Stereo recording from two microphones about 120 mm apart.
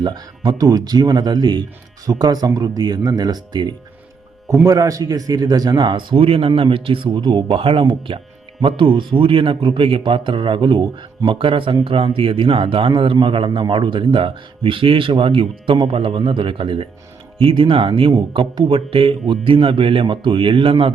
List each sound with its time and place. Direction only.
0.0 s a man's voice: 35° right (ahead or behind)
4.6 s a man's voice: 30° right (ahead or behind); by 20.9 s 45° right (ahead or behind)